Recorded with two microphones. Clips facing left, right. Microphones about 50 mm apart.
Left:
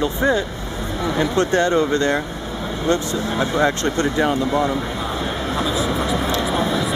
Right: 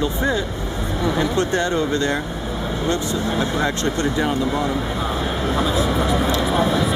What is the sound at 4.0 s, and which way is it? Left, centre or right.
Speech, left.